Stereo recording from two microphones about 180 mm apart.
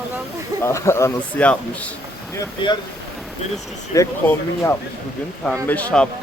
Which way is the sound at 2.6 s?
25° left (ahead or behind).